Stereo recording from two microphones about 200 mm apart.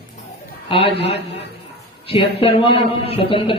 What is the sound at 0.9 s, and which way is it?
Speech, 60° left (ahead or behind).